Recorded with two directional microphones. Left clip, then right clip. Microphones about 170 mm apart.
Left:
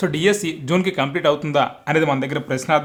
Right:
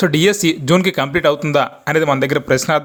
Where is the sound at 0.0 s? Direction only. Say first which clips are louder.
Right 5 dB; 30° right (ahead or behind).